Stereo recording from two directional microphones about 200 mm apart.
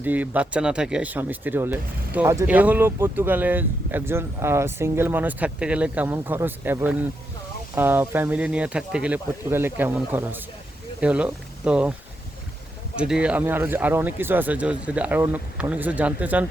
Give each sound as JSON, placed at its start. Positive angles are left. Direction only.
{"t": 0.0, "sound": "speech", "side_deg": -10}
{"t": 13.0, "sound": "speech", "side_deg": -5}